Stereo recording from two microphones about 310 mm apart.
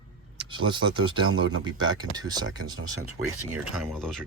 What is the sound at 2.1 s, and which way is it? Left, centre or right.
Speech, centre.